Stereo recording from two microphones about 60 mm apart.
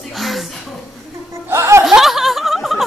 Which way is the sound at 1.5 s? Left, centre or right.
Right.